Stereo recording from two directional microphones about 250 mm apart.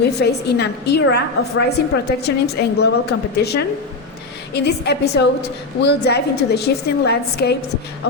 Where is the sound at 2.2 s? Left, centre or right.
Left.